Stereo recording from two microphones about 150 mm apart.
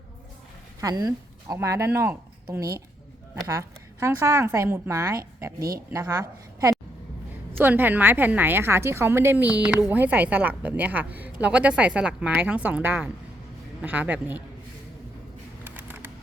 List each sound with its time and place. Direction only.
0.8 s a woman's voice: 25° right (ahead or behind)
7.6 s a woman's voice: 10° right (ahead or behind)
15.6 s a sound: 15° right (ahead or behind)